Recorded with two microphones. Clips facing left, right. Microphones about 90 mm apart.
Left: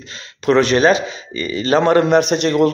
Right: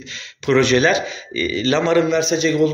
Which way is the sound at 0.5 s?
40° left (ahead or behind).